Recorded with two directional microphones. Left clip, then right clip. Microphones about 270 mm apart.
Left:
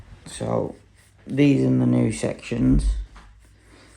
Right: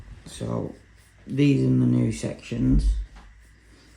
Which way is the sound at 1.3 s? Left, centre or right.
Centre.